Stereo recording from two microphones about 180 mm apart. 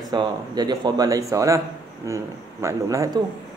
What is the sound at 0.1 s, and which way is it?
Speech, 25° right (ahead or behind).